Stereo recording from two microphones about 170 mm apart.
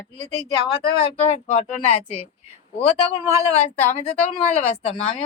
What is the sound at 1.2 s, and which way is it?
A woman's voice, 40° left (ahead or behind).